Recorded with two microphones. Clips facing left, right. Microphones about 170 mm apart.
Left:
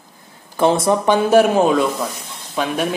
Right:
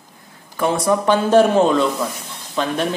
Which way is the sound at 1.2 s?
10° left (ahead or behind).